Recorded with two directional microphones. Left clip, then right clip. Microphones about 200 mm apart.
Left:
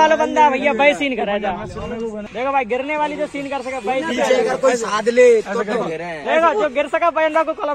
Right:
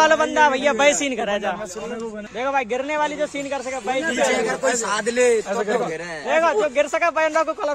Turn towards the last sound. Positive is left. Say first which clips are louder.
# left 3 dB
turn(degrees=-10)  # may be behind; listen again after turning